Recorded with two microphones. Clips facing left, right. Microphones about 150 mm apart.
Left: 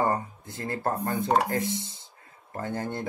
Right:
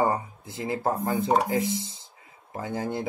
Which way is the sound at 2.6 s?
10° right (ahead or behind).